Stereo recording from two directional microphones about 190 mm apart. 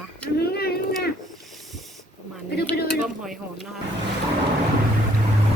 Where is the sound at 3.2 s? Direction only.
Centre (ahead or behind).